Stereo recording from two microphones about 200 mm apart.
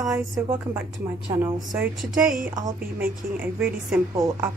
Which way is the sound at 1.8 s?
5° right (ahead or behind).